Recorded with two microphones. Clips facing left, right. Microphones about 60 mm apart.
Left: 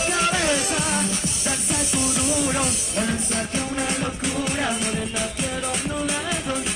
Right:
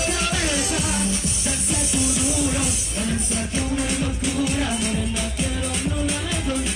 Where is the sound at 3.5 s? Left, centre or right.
Left.